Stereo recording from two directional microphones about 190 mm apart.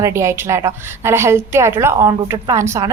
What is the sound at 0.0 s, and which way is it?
A woman's voice, 15° right (ahead or behind).